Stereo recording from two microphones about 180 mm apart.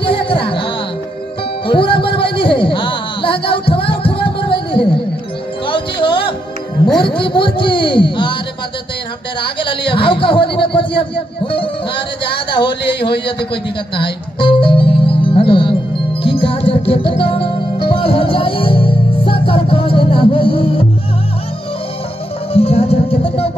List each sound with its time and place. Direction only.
0.0 s music: 30° left (ahead or behind)
1.7 s music: 30° left (ahead or behind)
7.2 s a man's voice: 30° left (ahead or behind)
9.4 s a man's voice: 30° left (ahead or behind)
11.5 s music: 30° left (ahead or behind)
22.5 s music: 35° left (ahead or behind)